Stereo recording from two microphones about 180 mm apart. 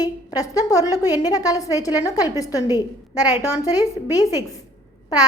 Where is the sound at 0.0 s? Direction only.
20° left (ahead or behind).